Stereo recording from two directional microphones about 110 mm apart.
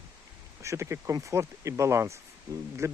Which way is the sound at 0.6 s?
25° right (ahead or behind).